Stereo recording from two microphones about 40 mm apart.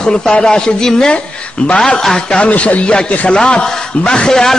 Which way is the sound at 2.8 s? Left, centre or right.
Left.